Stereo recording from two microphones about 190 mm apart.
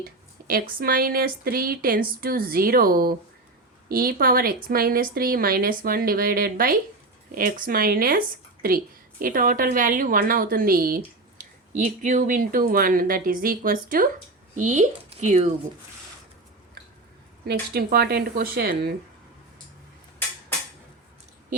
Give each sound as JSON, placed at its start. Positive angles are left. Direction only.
{"t": 0.4, "sound": "a woman's voice", "side_deg": -50}
{"t": 17.4, "sound": "a woman's voice", "side_deg": -55}